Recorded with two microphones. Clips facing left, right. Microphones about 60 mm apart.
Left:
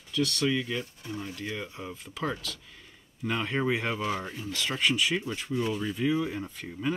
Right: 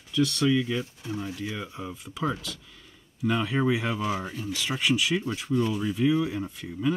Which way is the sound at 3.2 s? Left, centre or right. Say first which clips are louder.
Right 3 dB; centre.